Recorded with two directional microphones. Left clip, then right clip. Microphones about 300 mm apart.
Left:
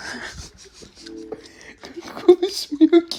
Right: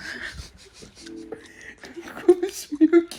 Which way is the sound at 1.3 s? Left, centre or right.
Left.